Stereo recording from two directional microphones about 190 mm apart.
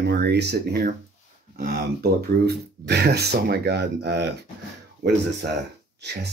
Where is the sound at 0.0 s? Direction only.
60° right (ahead or behind).